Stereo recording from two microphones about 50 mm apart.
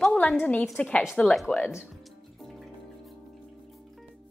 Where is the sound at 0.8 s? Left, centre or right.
Left.